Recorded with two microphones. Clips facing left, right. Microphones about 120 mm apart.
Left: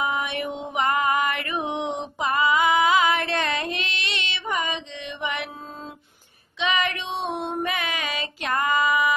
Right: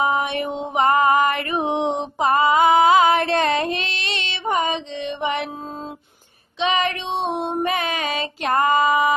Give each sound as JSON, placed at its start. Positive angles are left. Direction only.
{"t": 0.0, "sound": "music", "side_deg": -30}
{"t": 6.6, "sound": "child singing", "side_deg": -30}